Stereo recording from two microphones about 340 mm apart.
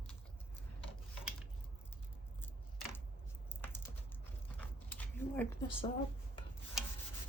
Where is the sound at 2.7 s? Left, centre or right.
Centre.